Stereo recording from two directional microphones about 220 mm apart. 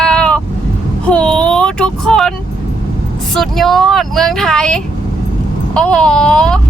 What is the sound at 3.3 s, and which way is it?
Speech, centre (ahead or behind).